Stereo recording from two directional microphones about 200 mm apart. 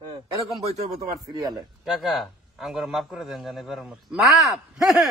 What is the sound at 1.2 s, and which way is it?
Speech, 20° right (ahead or behind).